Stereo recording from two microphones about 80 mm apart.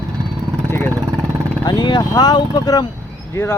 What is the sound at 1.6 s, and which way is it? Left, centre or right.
Speech, left.